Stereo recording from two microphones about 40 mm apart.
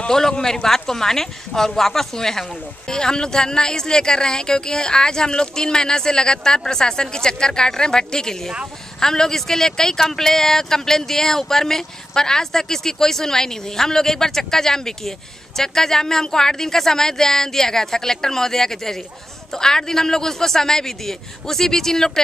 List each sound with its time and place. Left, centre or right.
0.1 s speech: centre